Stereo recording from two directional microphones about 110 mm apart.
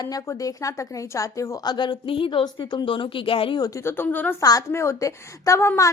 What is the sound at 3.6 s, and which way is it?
A woman's voice, 30° left (ahead or behind).